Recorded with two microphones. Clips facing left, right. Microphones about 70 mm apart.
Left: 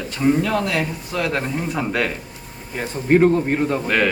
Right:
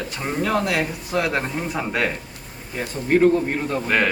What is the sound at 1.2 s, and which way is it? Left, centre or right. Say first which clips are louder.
Speech: left 1 dB; centre.